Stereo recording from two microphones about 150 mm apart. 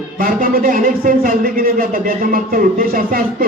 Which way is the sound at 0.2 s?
65° right (ahead or behind).